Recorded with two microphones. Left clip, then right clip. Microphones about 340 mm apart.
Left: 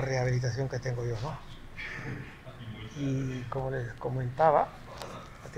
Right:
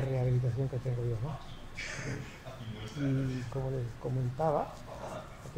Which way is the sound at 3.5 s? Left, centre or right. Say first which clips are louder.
Left 4 dB; left.